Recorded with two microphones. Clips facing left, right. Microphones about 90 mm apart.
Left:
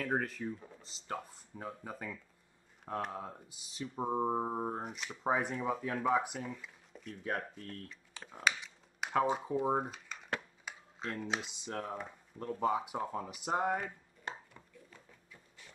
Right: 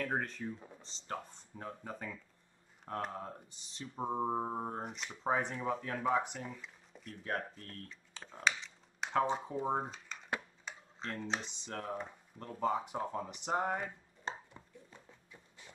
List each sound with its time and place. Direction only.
0.0 s speech: 5° left (ahead or behind)
14.2 s chopping: 25° right (ahead or behind)